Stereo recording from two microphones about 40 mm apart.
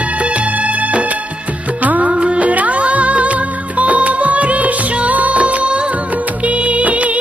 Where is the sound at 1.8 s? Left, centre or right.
Right.